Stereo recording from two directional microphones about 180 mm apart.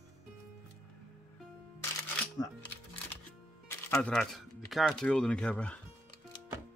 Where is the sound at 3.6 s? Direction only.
10° left (ahead or behind).